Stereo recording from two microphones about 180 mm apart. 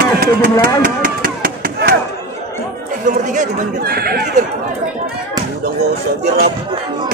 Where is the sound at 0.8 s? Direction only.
50° right (ahead or behind).